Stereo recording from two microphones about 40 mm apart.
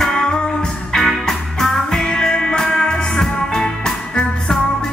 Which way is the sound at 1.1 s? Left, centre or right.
Centre.